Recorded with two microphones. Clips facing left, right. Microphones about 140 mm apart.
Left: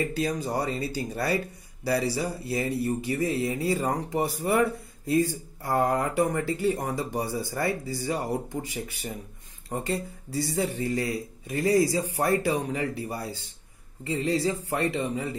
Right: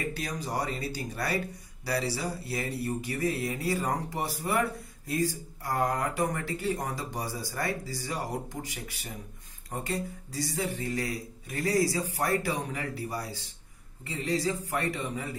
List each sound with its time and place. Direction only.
0.2 s speech: 25° left (ahead or behind)